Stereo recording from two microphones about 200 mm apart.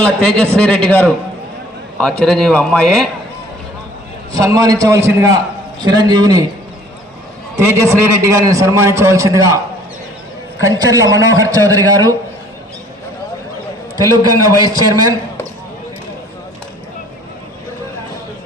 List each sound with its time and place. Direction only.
0.0 s a man's voice: 5° left (ahead or behind)
4.3 s a man's voice: 15° right (ahead or behind)
7.6 s a man's voice: 10° right (ahead or behind)
10.6 s a man's voice: 15° right (ahead or behind)
14.3 s a man's voice: 15° right (ahead or behind)